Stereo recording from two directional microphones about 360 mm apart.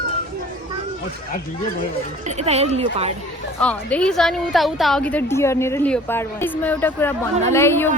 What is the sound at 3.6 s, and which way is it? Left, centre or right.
A woman's voice, centre.